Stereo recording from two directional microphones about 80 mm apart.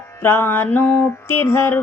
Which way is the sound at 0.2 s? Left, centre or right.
Left.